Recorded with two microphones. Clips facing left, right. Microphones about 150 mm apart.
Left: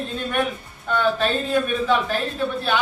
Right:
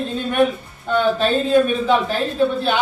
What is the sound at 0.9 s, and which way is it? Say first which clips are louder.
A man's voice: right 4 dB; 20° right (ahead or behind).